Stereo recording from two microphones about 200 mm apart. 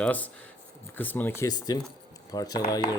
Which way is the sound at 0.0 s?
5° left (ahead or behind).